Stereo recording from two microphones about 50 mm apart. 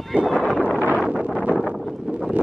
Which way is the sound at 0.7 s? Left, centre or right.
Right.